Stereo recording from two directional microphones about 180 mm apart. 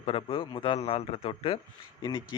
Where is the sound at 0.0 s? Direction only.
30° left (ahead or behind).